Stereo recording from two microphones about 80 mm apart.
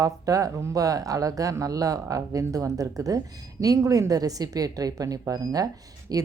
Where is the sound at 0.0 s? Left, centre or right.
Right.